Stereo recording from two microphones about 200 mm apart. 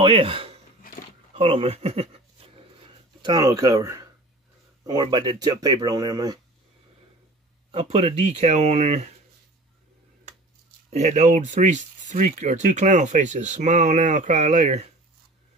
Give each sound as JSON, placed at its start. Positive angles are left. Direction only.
{"t": 0.0, "sound": "speech", "side_deg": -25}
{"t": 3.2, "sound": "speech", "side_deg": -20}
{"t": 7.7, "sound": "speech", "side_deg": -30}
{"t": 10.9, "sound": "speech", "side_deg": -35}